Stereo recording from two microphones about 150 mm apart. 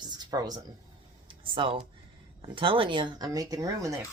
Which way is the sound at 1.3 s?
35° right (ahead or behind).